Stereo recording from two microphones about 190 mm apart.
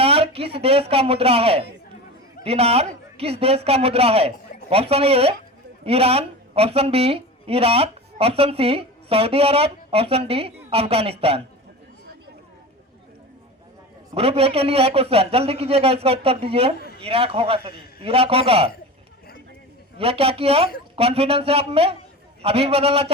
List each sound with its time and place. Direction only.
0.0 s a man's voice: 30° right (ahead or behind)
14.1 s a man's voice: 30° right (ahead or behind)
20.0 s a man's voice: 30° right (ahead or behind)